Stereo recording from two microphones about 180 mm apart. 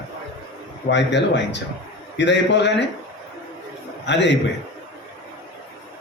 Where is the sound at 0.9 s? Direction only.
75° left (ahead or behind).